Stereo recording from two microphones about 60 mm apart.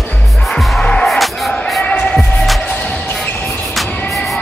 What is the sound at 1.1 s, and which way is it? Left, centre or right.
Music, centre.